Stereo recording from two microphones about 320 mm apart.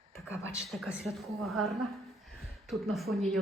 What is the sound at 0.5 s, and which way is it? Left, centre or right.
A man's voice, centre.